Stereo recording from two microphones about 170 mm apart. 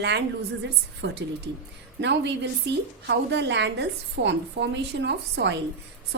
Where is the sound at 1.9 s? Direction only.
90° right.